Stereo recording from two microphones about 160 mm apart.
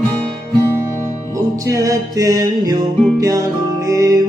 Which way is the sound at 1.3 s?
20° right (ahead or behind).